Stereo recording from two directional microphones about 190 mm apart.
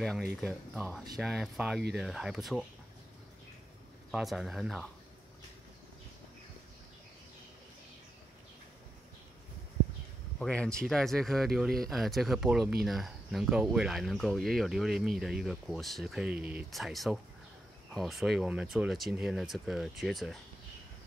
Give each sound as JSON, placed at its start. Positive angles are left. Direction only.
{"t": 0.0, "sound": "speech", "side_deg": 5}
{"t": 4.1, "sound": "speech", "side_deg": 0}
{"t": 10.4, "sound": "speech", "side_deg": 5}